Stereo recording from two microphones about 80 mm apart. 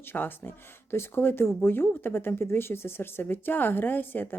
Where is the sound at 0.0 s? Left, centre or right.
Left.